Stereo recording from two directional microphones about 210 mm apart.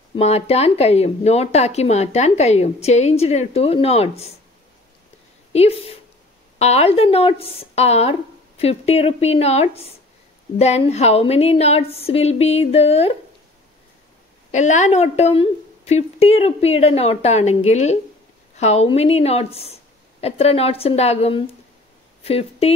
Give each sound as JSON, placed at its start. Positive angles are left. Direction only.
{"t": 0.1, "sound": "speech", "side_deg": 30}
{"t": 5.5, "sound": "a woman's voice", "side_deg": 30}
{"t": 14.5, "sound": "a woman's voice", "side_deg": 35}